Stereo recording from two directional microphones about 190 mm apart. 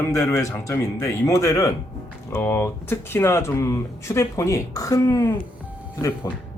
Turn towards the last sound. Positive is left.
turn(degrees=15)  # may be behind; listen again after turning